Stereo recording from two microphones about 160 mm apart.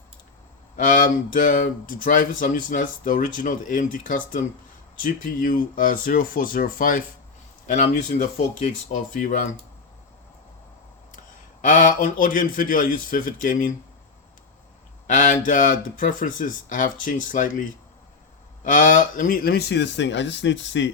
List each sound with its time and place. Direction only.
0.8 s speech: 55° left (ahead or behind)
8.6 s speech: 50° left (ahead or behind)
11.6 s speech: 55° left (ahead or behind)
15.0 s speech: 50° left (ahead or behind)
18.6 s speech: 55° left (ahead or behind); by 20.7 s 90° left